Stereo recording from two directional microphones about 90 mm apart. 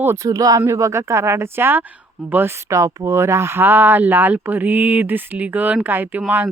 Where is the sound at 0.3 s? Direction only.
40° right (ahead or behind); by 2.7 s 25° right (ahead or behind).